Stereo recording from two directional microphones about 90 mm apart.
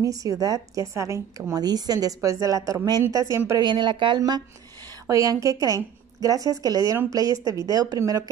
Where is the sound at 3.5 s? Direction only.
60° right (ahead or behind).